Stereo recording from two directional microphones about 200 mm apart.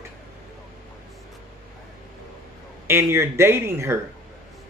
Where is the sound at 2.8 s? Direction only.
10° right (ahead or behind).